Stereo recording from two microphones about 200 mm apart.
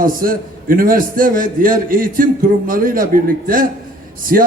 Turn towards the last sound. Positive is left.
turn(degrees=-45)  # may be behind; listen again after turning